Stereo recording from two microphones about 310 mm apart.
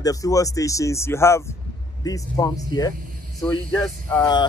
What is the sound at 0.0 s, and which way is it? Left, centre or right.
Speech, centre.